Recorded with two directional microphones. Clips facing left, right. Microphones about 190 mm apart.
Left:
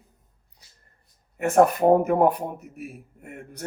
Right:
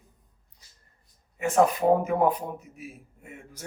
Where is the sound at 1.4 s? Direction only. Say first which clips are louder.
Left 4 dB; 55° left (ahead or behind).